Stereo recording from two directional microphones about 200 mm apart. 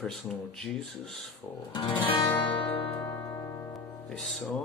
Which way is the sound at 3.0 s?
15° left (ahead or behind).